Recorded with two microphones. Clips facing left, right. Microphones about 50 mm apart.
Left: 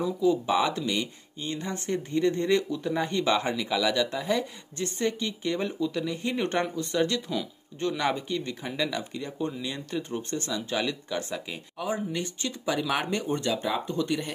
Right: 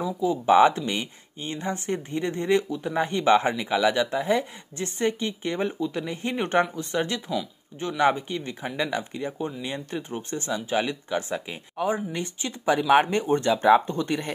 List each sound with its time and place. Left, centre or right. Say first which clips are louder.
0.2 s speech: right 7 dB; right